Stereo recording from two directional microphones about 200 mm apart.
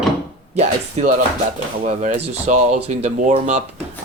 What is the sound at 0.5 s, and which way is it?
Speech, 35° right (ahead or behind).